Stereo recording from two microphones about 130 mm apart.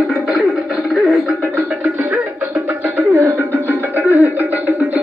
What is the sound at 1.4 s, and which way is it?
Music, 20° right (ahead or behind).